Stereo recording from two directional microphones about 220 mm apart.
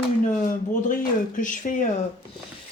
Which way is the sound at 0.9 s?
40° left (ahead or behind).